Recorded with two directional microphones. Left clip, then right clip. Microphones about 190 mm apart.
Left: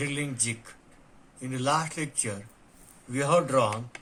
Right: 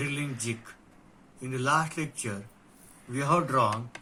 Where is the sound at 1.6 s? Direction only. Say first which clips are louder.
Even; 20° left (ahead or behind).